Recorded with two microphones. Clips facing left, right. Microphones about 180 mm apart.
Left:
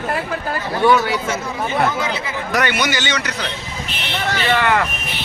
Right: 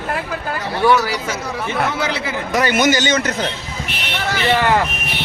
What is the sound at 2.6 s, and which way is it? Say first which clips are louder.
Speech: right 5 dB; 45° right (ahead or behind).